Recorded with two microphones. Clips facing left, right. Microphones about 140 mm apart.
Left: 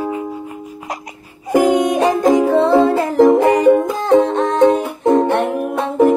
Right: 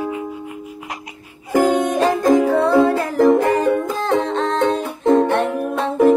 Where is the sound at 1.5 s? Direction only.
15° left (ahead or behind).